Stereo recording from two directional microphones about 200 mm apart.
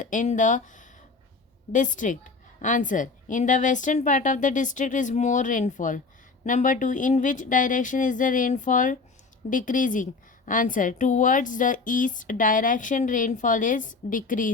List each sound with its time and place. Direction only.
0.0 s speech: 40° left (ahead or behind)
1.7 s a woman's voice: 40° left (ahead or behind)